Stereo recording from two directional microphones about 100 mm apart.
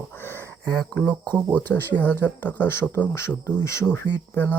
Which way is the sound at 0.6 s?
10° left (ahead or behind).